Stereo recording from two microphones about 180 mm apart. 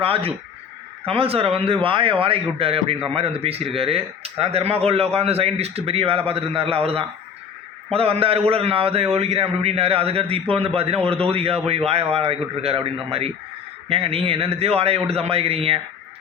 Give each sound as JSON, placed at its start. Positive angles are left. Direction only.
{"t": 0.0, "sound": "a man's voice", "side_deg": -30}